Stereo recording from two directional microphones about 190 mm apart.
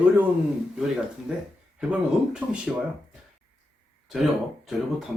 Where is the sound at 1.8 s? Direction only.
5° right (ahead or behind).